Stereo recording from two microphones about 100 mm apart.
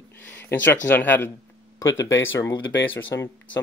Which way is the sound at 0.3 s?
20° left (ahead or behind).